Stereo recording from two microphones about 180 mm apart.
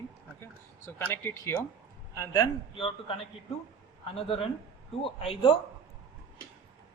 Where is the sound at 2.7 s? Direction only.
30° left (ahead or behind).